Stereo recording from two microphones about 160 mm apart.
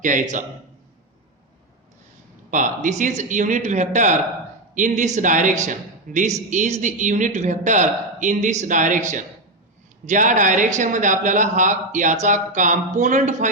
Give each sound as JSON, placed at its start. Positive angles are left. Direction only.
{"t": 0.0, "sound": "a man's voice", "side_deg": -50}
{"t": 2.5, "sound": "a man's voice", "side_deg": -50}